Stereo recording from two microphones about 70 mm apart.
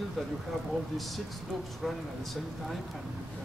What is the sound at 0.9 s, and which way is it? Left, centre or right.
Speech, centre.